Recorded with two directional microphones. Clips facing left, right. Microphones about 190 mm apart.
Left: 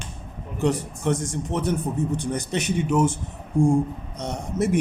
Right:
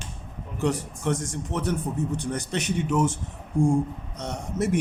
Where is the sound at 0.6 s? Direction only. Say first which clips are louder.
Left 3 dB; 20° left (ahead or behind).